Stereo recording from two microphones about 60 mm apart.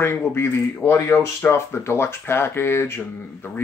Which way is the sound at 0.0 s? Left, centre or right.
Left.